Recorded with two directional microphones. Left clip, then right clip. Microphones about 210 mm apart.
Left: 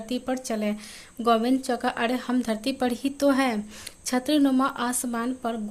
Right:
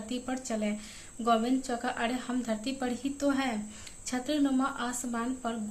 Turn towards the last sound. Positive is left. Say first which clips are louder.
# left 5 dB
turn(degrees=50)  # may be behind; listen again after turning